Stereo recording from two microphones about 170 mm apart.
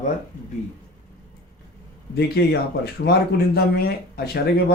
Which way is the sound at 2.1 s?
70° left (ahead or behind).